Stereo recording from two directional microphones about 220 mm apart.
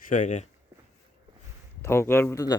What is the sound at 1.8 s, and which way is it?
Speech, 10° left (ahead or behind).